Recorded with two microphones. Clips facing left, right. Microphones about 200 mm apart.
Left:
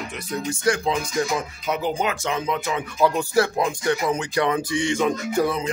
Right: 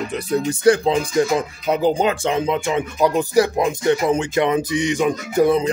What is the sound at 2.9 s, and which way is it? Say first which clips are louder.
Speech: right 3 dB; 15° right (ahead or behind).